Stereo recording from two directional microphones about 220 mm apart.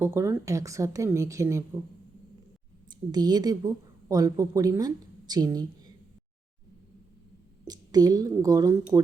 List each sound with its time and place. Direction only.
0.0 s a woman's voice: 10° right (ahead or behind)
3.1 s a woman's voice: 20° right (ahead or behind)
7.6 s a woman's voice: 15° right (ahead or behind)